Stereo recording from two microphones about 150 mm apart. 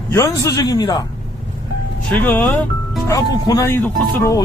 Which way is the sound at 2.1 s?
10° left (ahead or behind).